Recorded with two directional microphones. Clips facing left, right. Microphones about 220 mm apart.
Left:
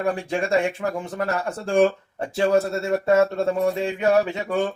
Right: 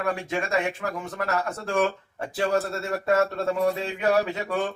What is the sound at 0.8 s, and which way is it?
Speech, 30° left (ahead or behind).